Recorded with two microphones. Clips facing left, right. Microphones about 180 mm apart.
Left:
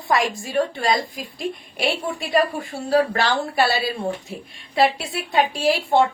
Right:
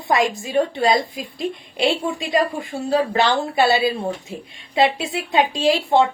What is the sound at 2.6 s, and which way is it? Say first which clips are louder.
A woman's voice: left 1 dB; 20° right (ahead or behind).